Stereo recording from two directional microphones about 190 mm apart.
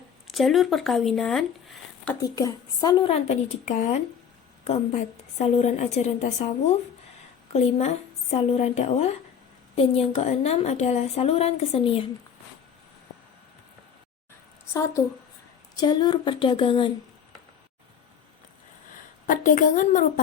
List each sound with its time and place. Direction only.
0.3 s speech: centre (ahead or behind)
2.2 s speech: 20° left (ahead or behind)
3.1 s a woman's voice: 35° left (ahead or behind)
7.5 s a woman's voice: 35° left (ahead or behind)
15.7 s speech: 20° left (ahead or behind)
19.3 s a woman's voice: 45° left (ahead or behind)